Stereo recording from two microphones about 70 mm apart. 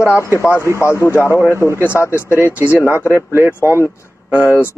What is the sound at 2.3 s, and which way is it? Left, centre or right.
Speech, right.